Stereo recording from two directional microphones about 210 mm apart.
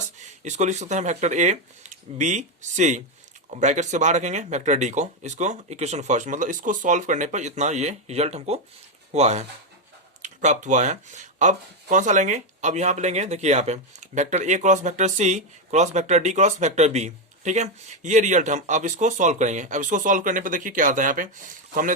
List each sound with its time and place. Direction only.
0.2 s speech: 35° right (ahead or behind)